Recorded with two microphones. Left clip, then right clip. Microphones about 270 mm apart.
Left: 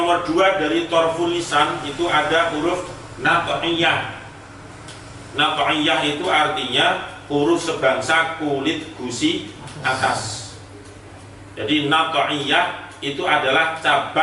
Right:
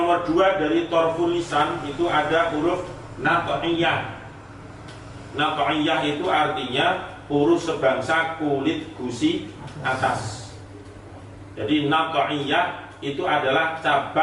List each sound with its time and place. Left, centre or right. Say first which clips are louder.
0.0 s a man's voice: left 2 dB; centre
5.4 s a man's voice: left 4 dB; centre
7.3 s speech: left 1 dB; right
7.6 s a man's voice: left 2 dB; centre
11.5 s a man's voice: left 3 dB; centre